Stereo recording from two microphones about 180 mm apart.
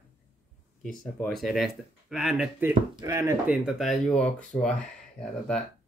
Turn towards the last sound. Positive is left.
turn(degrees=5)  # may be behind; listen again after turning